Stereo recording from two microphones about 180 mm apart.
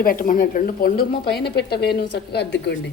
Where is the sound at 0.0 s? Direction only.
50° left (ahead or behind); by 2.7 s 70° left (ahead or behind).